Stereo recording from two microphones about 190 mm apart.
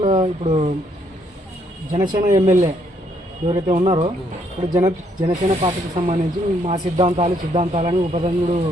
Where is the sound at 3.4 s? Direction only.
30° right (ahead or behind).